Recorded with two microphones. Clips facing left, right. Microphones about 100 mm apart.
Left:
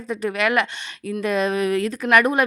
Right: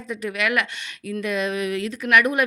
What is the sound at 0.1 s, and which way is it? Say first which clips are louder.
Speech: left 3 dB; 35° left (ahead or behind).